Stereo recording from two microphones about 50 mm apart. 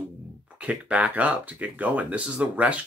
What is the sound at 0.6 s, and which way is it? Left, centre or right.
Speech, right.